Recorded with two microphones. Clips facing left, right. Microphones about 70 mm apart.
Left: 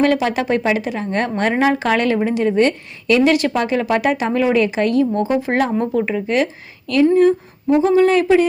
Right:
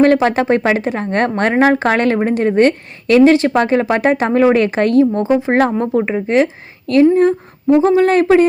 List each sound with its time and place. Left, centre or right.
0.0 s speech: right